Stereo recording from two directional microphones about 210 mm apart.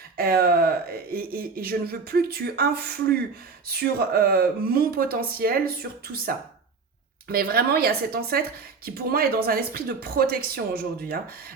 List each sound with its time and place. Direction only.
0.2 s a woman's voice: 45° right (ahead or behind)
7.3 s a woman's voice: 45° right (ahead or behind)